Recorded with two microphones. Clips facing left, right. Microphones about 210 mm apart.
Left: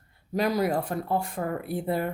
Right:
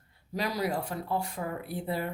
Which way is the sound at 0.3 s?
50° left (ahead or behind).